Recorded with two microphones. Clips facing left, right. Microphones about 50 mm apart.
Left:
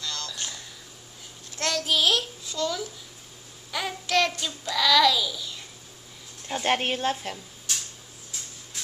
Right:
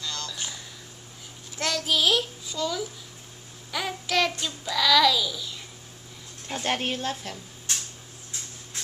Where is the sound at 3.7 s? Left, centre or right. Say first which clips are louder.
Even; centre.